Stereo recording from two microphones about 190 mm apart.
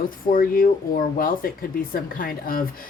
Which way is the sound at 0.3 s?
45° left (ahead or behind).